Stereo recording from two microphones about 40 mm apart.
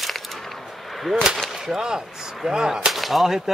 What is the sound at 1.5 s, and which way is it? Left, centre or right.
Speech, centre.